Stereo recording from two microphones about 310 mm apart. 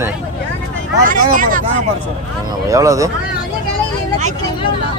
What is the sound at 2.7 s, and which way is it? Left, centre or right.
Speech, centre.